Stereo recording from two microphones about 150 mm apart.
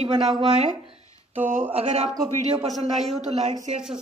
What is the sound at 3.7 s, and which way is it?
Speech, 45° right (ahead or behind).